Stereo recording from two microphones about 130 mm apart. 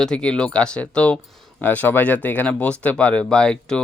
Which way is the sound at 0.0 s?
5° left (ahead or behind).